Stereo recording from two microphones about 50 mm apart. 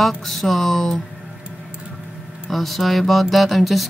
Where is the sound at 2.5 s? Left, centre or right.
Centre.